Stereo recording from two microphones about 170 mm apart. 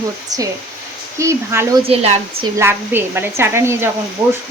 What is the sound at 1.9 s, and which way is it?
Speech, 35° right (ahead or behind).